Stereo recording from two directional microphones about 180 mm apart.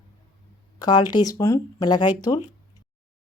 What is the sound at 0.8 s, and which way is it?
A woman's voice, 25° left (ahead or behind).